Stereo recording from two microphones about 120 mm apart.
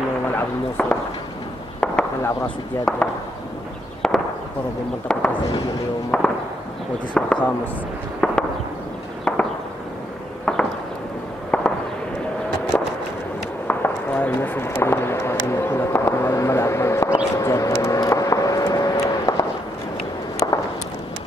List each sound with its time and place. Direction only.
0.8 s speech: 10° left (ahead or behind)
1.8 s chop: 10° left (ahead or behind)
2.2 s speech: 10° left (ahead or behind)
4.0 s firecracker: 5° left (ahead or behind)
5.1 s speech: 5° left (ahead or behind)
8.2 s fireworks: 10° left (ahead or behind)
10.4 s a sound: 5° left (ahead or behind)
11.5 s fireworks: 10° left (ahead or behind)
12.7 s a sound: 10° left (ahead or behind)
14.7 s vehicle: 20° left (ahead or behind)